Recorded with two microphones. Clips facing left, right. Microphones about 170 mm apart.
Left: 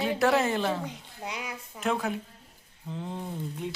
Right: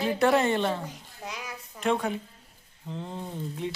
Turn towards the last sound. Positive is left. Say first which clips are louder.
# right 1 dB
turn(degrees=0)  # may be behind; listen again after turning